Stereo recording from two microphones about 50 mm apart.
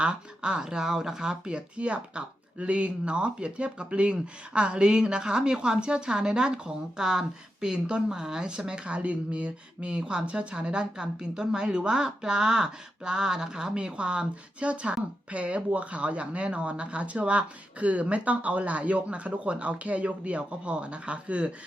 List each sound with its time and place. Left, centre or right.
0.0 s a woman's voice: centre